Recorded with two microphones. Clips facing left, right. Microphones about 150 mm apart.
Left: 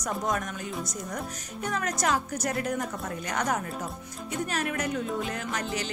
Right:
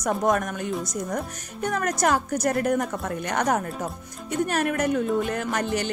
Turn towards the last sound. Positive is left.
turn(degrees=-60)  # may be behind; listen again after turning